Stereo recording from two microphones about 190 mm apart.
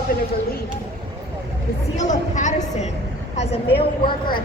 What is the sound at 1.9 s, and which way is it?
A woman's voice, 40° left (ahead or behind).